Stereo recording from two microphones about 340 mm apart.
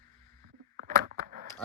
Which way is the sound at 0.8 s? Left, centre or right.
Right.